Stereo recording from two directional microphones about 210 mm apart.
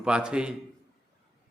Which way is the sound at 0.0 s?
5° right (ahead or behind).